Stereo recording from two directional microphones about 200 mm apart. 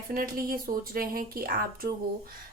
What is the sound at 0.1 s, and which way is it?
Speech, 45° right (ahead or behind).